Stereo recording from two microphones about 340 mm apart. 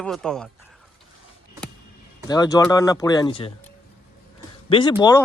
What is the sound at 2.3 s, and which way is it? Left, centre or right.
Speech, centre.